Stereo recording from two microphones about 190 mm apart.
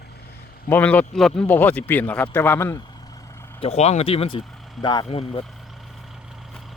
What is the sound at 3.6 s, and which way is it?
Speech, 35° left (ahead or behind).